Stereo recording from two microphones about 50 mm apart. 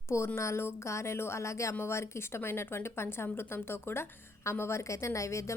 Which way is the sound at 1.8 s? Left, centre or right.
Left.